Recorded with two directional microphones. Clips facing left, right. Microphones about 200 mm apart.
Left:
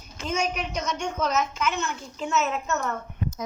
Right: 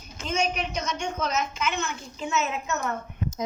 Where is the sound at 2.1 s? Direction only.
5° right (ahead or behind).